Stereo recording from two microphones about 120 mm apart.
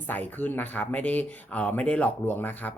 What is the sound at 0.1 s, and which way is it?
Speech, 15° left (ahead or behind).